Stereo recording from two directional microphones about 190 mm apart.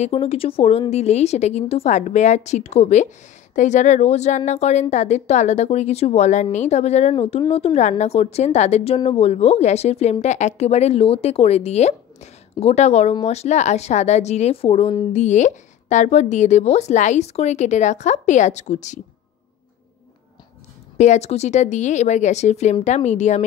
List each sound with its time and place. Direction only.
0.0 s speech: 30° left (ahead or behind)
21.0 s speech: 35° left (ahead or behind)